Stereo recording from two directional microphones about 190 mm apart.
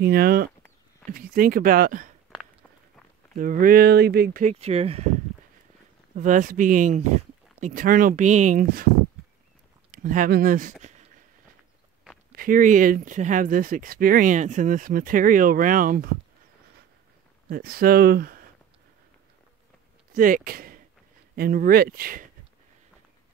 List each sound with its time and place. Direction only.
0.0 s speech: 55° right (ahead or behind)
3.3 s speech: 45° right (ahead or behind)
6.1 s speech: 40° right (ahead or behind)
9.8 s speech: 45° right (ahead or behind)
12.3 s speech: 45° right (ahead or behind)
17.5 s speech: 50° right (ahead or behind)
20.1 s speech: 45° right (ahead or behind)